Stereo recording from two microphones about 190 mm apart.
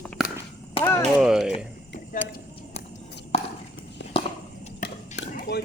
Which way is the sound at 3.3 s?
30° left (ahead or behind).